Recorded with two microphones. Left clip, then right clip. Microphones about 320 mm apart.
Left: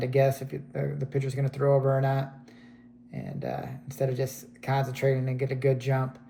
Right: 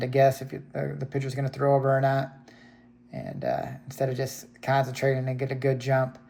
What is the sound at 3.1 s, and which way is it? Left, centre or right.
Speech, right.